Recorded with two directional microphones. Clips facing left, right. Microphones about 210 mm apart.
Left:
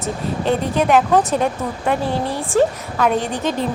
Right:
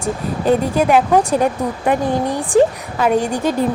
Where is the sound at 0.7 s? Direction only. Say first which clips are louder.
Right 1 dB; centre (ahead or behind).